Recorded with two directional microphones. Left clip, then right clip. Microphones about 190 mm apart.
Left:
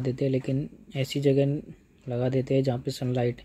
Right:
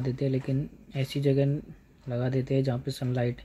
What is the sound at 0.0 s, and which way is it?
Speech, 25° left (ahead or behind).